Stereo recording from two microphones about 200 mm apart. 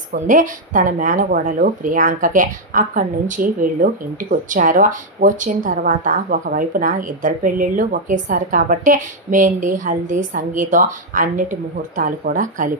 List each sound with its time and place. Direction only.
0.1 s a woman's voice: 40° right (ahead or behind)